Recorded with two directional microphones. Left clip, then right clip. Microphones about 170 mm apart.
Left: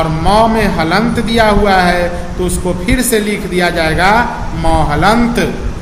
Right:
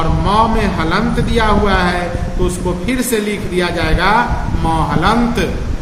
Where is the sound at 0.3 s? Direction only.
20° left (ahead or behind).